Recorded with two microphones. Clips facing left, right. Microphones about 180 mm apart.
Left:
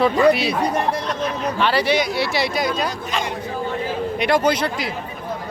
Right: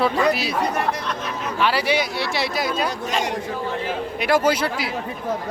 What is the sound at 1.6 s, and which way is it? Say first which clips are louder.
Speech: left 1 dB; 5° right (ahead or behind).